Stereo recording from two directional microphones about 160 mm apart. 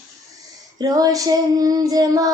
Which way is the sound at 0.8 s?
25° right (ahead or behind).